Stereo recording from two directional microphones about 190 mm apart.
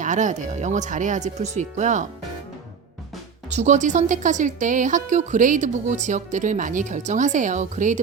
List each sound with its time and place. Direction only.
0.0 s speech: 40° right (ahead or behind)
3.5 s speech: 40° right (ahead or behind)